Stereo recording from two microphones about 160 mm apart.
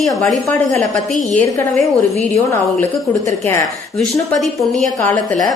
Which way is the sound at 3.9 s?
Centre (ahead or behind).